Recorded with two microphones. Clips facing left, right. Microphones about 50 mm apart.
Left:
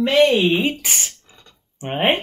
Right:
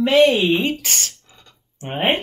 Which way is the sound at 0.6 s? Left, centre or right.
Centre.